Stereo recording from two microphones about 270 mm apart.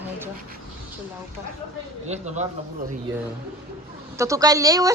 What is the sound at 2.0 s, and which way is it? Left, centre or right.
Speech, right.